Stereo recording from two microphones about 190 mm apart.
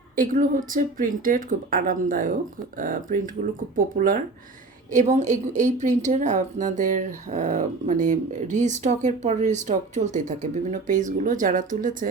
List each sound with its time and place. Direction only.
0.2 s a woman's voice: 45° right (ahead or behind)